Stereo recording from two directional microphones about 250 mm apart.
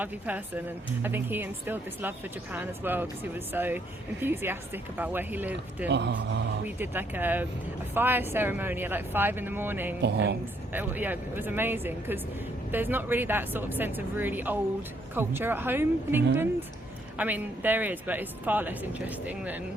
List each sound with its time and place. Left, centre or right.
0.0 s a woman's voice: centre
5.9 s a man's voice: right
6.7 s a woman's voice: centre
10.0 s a man's voice: right
10.7 s a woman's voice: centre